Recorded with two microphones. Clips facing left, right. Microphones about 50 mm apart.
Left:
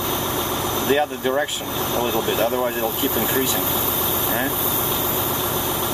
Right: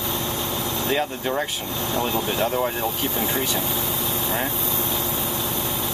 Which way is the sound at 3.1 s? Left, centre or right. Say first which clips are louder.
Left 3 dB; centre.